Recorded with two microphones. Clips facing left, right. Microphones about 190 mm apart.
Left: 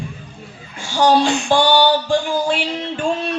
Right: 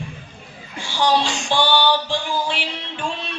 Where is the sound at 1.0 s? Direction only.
50° left (ahead or behind).